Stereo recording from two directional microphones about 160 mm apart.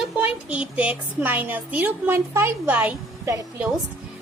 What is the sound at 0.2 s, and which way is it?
A woman's voice, 10° right (ahead or behind).